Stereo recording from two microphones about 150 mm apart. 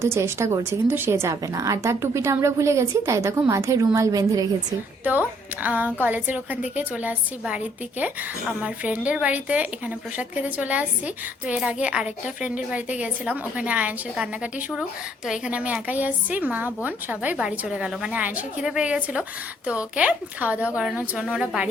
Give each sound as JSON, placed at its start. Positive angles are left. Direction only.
{"t": 0.0, "sound": "a woman's voice", "side_deg": -15}
{"t": 5.0, "sound": "a woman's voice", "side_deg": -10}